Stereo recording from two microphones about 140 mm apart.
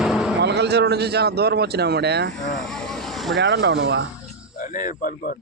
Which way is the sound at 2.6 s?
5° left (ahead or behind).